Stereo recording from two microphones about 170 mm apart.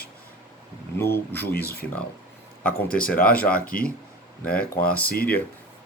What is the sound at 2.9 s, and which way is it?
Speech, 55° left (ahead or behind).